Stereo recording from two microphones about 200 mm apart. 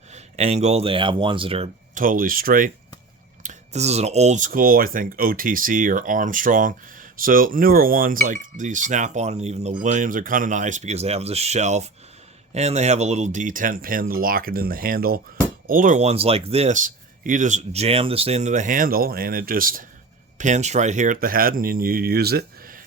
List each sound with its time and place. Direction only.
0.1 s speech: 35° right (ahead or behind)
2.0 s speech: 45° right (ahead or behind)